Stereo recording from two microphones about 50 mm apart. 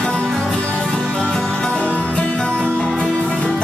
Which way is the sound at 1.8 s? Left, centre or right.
Left.